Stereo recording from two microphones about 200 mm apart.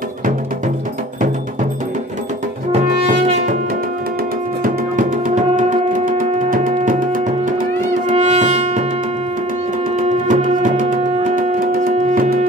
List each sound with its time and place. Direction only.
2.7 s brass instrument: 35° right (ahead or behind)
4.9 s music: 40° right (ahead or behind)
9.9 s music: 40° right (ahead or behind)